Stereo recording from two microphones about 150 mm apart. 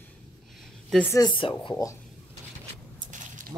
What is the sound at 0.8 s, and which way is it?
Speech, 5° left (ahead or behind).